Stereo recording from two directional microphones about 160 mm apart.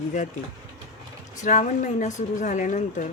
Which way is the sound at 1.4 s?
50° left (ahead or behind).